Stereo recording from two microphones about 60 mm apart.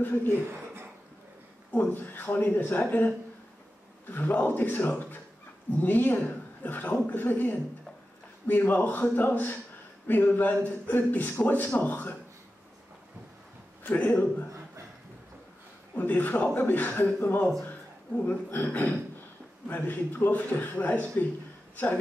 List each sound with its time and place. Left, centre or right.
0.0 s a man's voice: left
1.7 s a man's voice: left
4.1 s a man's voice: left
13.8 s a man's voice: left
16.0 s a man's voice: left